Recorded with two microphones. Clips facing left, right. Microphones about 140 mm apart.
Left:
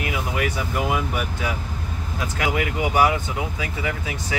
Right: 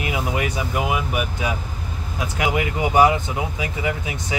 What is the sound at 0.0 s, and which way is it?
Speech, 20° right (ahead or behind).